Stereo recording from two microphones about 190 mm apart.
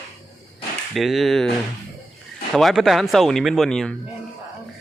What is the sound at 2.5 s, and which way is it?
Speech, centre (ahead or behind).